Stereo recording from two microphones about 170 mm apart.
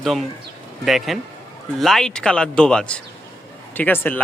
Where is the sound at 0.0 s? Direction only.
Centre (ahead or behind).